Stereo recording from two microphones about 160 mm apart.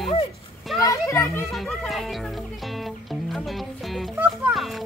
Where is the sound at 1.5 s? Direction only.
Centre (ahead or behind).